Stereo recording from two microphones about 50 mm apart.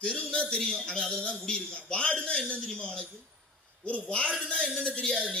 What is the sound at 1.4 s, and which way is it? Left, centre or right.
Speech, centre.